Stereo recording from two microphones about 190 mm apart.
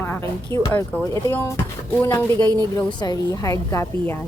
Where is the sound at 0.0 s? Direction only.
10° left (ahead or behind).